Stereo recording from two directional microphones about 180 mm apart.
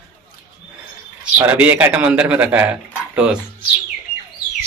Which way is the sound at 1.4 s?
10° right (ahead or behind).